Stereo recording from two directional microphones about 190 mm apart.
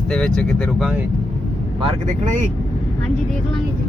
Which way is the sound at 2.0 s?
40° right (ahead or behind).